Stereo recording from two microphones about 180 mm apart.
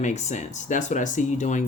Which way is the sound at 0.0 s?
40° left (ahead or behind).